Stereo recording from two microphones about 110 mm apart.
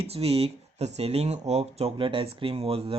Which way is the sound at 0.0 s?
65° right (ahead or behind).